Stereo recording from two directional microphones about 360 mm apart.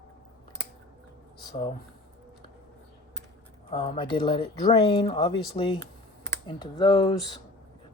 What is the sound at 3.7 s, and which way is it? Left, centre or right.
Speech, centre.